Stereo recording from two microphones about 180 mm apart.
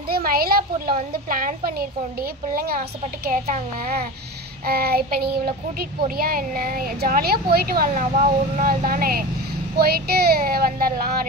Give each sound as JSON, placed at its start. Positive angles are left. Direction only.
{"t": 0.1, "sound": "a woman's voice", "side_deg": -55}
{"t": 3.3, "sound": "a woman's voice", "side_deg": -45}
{"t": 4.6, "sound": "a woman's voice", "side_deg": -55}